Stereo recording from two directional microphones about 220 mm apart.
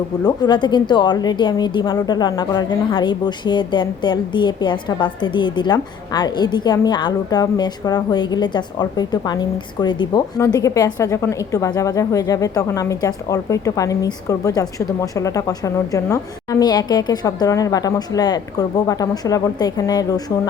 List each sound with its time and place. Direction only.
0.3 s a woman's voice: 20° left (ahead or behind)